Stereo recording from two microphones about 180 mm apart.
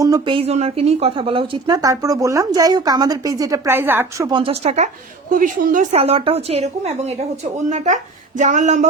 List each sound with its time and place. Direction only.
0.0 s a woman's voice: 25° right (ahead or behind)
4.3 s a woman's voice: 30° right (ahead or behind)
5.3 s a woman's voice: 45° right (ahead or behind)